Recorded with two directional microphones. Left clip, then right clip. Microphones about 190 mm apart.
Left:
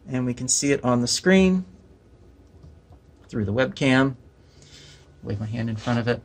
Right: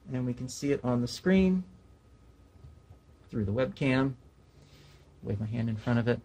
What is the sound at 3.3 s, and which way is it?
Speech, centre (ahead or behind).